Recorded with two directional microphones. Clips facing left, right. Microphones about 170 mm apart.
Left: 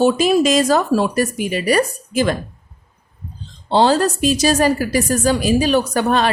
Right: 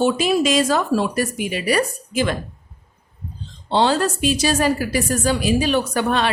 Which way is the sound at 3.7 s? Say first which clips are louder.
Left 4 dB; 40° left (ahead or behind).